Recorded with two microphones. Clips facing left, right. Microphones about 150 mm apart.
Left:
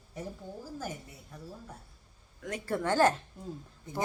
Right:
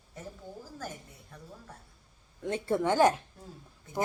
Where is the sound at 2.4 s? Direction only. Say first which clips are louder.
Right 5 dB; 30° right (ahead or behind).